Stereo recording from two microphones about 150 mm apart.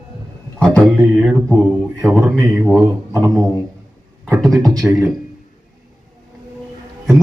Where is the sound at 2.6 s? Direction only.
Centre (ahead or behind).